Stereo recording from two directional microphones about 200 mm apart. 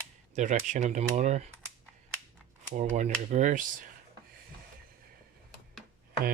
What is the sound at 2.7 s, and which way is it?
Speech, 35° right (ahead or behind).